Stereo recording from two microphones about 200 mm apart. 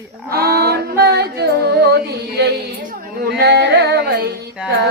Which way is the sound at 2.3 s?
55° right (ahead or behind).